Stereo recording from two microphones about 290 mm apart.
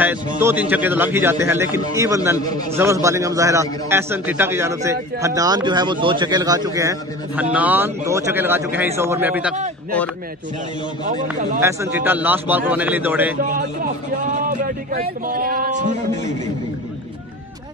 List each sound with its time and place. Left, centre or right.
0.4 s a man's voice: centre
2.3 s a man's voice: centre
2.7 s a man's voice: centre
11.6 s a man's voice: centre
13.4 s a man's voice: right